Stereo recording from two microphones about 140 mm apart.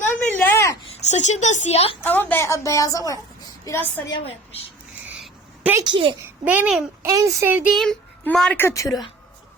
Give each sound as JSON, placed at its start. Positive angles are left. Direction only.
{"t": 0.3, "sound": "a sound", "side_deg": 10}
{"t": 0.9, "sound": "speech", "side_deg": 55}
{"t": 2.0, "sound": "a woman's voice", "side_deg": 15}
{"t": 5.8, "sound": "a child's voice", "side_deg": -35}
{"t": 6.2, "sound": "a child's voice", "side_deg": -15}
{"t": 7.0, "sound": "a child's voice", "side_deg": -25}
{"t": 7.7, "sound": "a child's voice", "side_deg": 0}
{"t": 8.5, "sound": "a woman's voice", "side_deg": 20}